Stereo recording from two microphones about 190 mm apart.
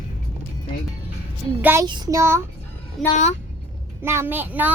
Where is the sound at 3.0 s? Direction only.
Centre (ahead or behind).